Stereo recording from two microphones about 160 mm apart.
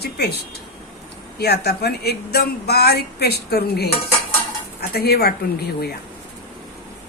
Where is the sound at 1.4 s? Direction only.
85° left.